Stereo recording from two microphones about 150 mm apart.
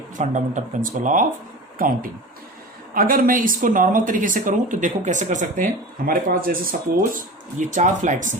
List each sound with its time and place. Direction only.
0.2 s speech: 55° right (ahead or behind)
2.9 s speech: 70° right (ahead or behind)